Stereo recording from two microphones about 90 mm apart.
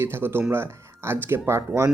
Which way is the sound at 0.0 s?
25° right (ahead or behind).